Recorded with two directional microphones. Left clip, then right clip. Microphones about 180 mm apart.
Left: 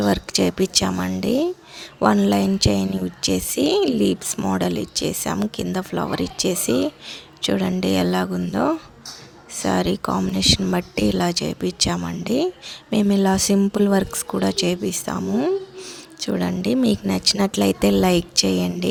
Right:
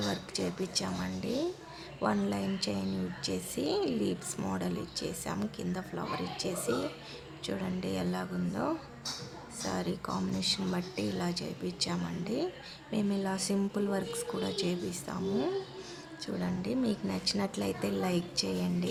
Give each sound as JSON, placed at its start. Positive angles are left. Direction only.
{"t": 0.1, "sound": "speech", "side_deg": 55}